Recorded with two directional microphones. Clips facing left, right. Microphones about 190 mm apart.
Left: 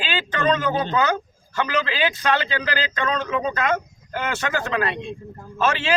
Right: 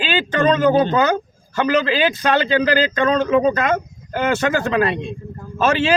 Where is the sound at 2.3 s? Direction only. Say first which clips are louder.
Right 7 dB; 50° right (ahead or behind).